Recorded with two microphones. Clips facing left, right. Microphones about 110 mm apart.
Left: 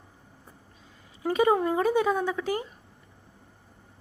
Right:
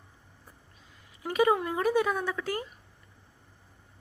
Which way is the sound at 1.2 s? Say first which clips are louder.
Left 3 dB; 30° left (ahead or behind).